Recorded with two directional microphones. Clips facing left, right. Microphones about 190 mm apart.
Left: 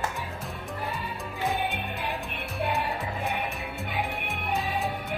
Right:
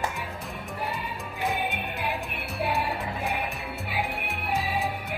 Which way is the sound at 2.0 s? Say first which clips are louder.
Right 1 dB; 10° right (ahead or behind).